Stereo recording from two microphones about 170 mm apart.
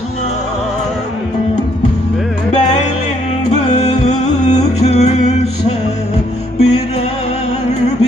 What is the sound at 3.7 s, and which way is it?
Music, 40° left (ahead or behind).